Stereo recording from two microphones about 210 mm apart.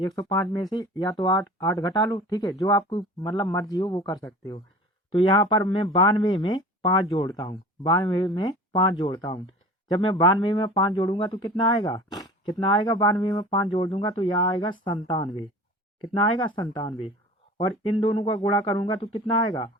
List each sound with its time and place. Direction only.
0.0 s speech: 20° left (ahead or behind)